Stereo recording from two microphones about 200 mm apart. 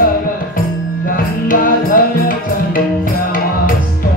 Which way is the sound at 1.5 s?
45° left (ahead or behind).